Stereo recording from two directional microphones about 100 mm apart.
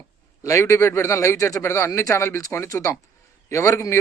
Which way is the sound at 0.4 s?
30° left (ahead or behind).